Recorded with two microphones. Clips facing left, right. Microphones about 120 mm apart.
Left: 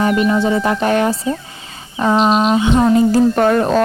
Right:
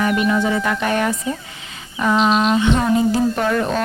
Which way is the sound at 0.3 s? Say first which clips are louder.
Left 3 dB; 30° left (ahead or behind).